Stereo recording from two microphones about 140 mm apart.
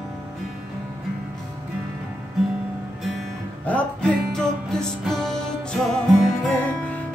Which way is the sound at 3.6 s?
10° left (ahead or behind).